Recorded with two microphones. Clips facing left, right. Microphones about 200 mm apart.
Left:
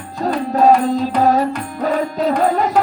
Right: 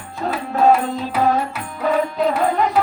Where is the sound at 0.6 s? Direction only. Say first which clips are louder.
Left 3 dB; 40° left (ahead or behind).